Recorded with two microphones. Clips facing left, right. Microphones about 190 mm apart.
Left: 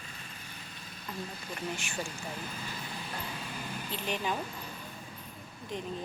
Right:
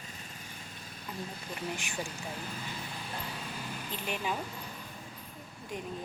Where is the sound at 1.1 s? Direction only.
10° right (ahead or behind).